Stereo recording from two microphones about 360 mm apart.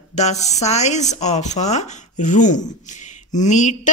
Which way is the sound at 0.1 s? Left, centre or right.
Centre.